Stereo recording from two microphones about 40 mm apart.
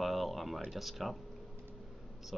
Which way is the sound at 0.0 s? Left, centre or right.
Centre.